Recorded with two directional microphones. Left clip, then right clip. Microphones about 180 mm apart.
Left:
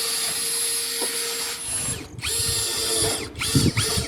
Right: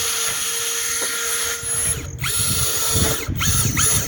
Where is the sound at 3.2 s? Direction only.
10° left (ahead or behind).